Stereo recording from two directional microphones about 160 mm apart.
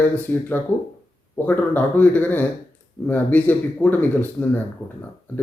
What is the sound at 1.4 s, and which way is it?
Speech, 10° left (ahead or behind).